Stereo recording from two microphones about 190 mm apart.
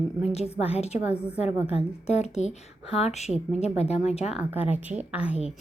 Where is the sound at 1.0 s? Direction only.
10° right (ahead or behind).